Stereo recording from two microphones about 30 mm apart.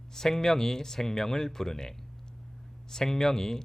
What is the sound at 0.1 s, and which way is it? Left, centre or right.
Speech, centre.